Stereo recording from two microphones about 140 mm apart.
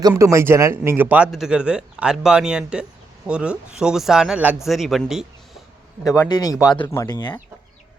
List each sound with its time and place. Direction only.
0.1 s speech: 20° right (ahead or behind); by 5.2 s centre (ahead or behind)
6.1 s speech: 25° left (ahead or behind)